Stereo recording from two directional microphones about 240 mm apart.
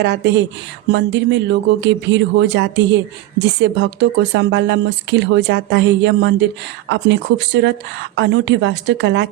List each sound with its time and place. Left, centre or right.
0.0 s speech: right